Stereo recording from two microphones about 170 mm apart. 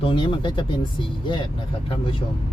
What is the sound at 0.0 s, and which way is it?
Speech, 30° left (ahead or behind).